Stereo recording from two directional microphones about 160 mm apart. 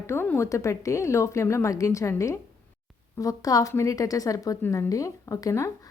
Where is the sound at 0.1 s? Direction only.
15° left (ahead or behind).